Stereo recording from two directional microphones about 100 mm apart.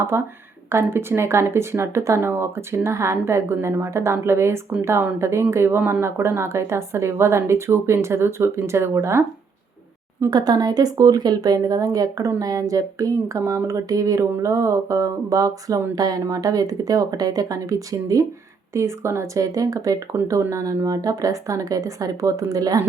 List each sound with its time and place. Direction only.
0.0 s a woman's voice: 25° right (ahead or behind)
10.2 s speech: 45° right (ahead or behind)